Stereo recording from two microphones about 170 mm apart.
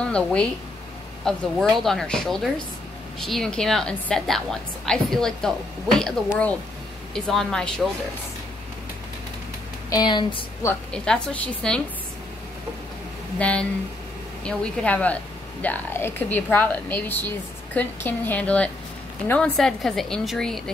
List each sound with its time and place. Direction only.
0.0 s a woman's voice: 5° left (ahead or behind)
9.8 s speech: 25° left (ahead or behind)
10.7 s a woman's voice: 5° left (ahead or behind)
13.4 s a woman's voice: 5° left (ahead or behind)